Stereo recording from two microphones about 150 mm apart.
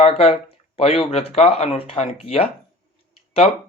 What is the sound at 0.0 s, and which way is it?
Speech, 40° left (ahead or behind).